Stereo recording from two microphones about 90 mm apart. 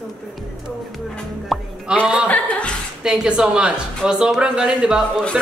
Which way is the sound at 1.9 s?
10° right (ahead or behind).